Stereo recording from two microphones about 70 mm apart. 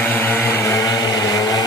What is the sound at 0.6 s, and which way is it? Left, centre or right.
Vehicle, left.